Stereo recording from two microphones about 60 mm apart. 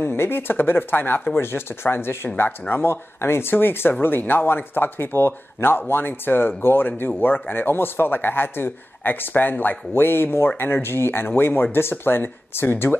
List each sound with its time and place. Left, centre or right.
0.0 s speech: left